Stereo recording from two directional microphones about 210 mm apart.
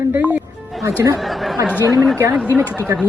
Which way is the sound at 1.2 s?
Centre (ahead or behind).